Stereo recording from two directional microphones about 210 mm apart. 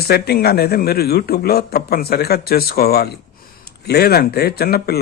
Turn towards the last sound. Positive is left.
turn(degrees=45)  # may be behind; listen again after turning